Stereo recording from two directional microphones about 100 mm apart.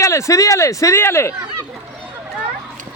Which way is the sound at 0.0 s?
30° left (ahead or behind).